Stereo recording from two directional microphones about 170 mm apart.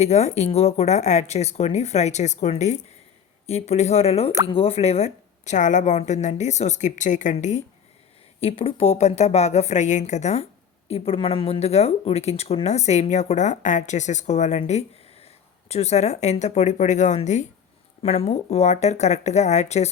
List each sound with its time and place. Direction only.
0.0 s a woman's voice: 40° left (ahead or behind)
8.4 s speech: 35° left (ahead or behind)